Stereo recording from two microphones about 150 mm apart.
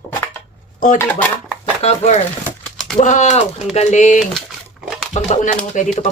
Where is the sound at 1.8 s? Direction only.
45° left (ahead or behind).